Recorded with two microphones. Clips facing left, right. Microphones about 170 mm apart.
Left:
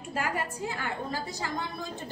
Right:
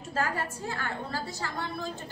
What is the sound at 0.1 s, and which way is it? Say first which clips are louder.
A woman's voice: right 1 dB; 15° left (ahead or behind).